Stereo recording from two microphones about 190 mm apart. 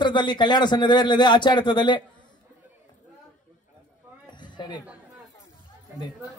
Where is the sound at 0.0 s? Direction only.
25° left (ahead or behind).